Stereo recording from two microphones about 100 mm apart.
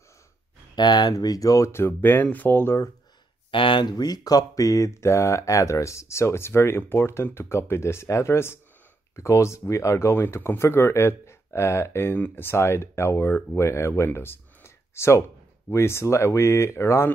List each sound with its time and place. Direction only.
0.7 s speech: 45° left (ahead or behind); by 2.9 s 25° left (ahead or behind)
3.5 s speech: 55° left (ahead or behind)
3.9 s speech: 40° left (ahead or behind)